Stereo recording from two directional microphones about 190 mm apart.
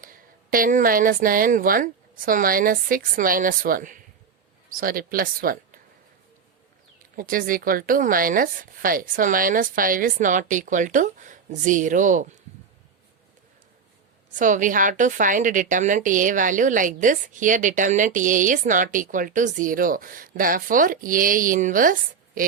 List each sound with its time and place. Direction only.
0.0 s a woman's voice: 50° right (ahead or behind)
7.2 s a woman's voice: 45° right (ahead or behind)
14.3 s a woman's voice: 45° right (ahead or behind)